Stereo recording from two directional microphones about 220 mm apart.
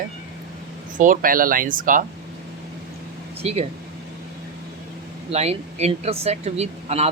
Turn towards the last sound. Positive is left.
turn(degrees=-30)  # may be behind; listen again after turning